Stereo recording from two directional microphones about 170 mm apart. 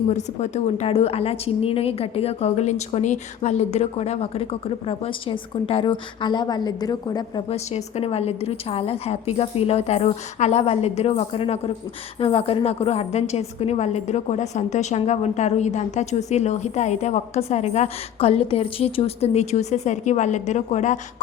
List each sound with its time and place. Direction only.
0.1 s a woman's voice: 45° left (ahead or behind); by 7.4 s 25° left (ahead or behind)
7.5 s a woman's voice: 40° left (ahead or behind)